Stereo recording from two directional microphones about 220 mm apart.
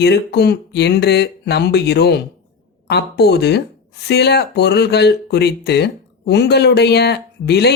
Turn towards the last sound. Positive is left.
turn(degrees=50)  # may be behind; listen again after turning